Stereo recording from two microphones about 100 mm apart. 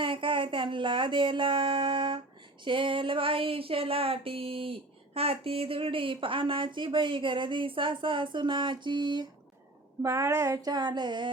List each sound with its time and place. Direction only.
0.0 s speech: 60° right (ahead or behind)
2.6 s a sound: 60° right (ahead or behind)
5.1 s speech: 80° right; by 9.2 s 45° right (ahead or behind)
10.0 s speech: 30° right (ahead or behind); by 11.3 s 50° right (ahead or behind)